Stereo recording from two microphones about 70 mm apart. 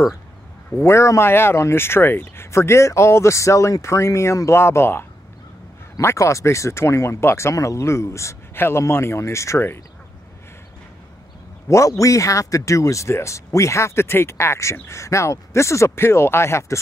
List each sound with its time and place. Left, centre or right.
0.7 s speech: left
11.7 s speech: left